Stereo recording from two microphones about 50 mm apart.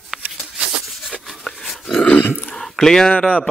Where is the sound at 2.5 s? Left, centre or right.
Centre.